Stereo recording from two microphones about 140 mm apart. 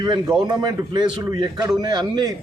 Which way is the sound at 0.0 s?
30° right (ahead or behind).